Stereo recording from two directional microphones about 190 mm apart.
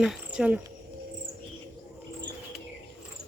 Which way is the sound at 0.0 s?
5° right (ahead or behind).